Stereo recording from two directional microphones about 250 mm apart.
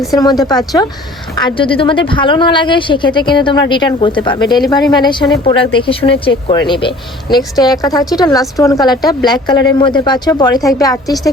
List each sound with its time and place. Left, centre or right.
0.1 s a woman's voice: centre